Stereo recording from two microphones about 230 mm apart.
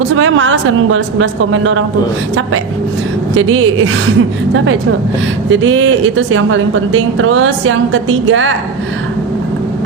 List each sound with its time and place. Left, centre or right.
0.1 s a woman's voice: right
3.3 s a woman's voice: right